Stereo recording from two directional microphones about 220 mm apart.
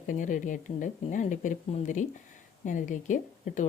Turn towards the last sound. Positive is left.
turn(degrees=35)  # may be behind; listen again after turning